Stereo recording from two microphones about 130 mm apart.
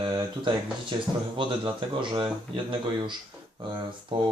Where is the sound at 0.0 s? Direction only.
35° right (ahead or behind).